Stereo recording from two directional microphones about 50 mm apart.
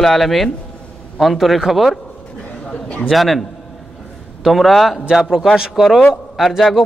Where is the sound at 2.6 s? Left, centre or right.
Left.